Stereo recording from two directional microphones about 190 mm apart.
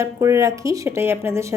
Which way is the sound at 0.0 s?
15° right (ahead or behind).